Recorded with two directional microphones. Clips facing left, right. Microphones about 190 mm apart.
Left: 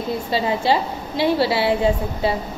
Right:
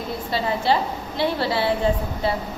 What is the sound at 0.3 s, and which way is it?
A woman's voice, 15° left (ahead or behind).